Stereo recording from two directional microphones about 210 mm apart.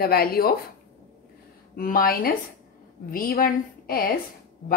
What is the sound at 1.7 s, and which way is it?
A woman's voice, 40° left (ahead or behind).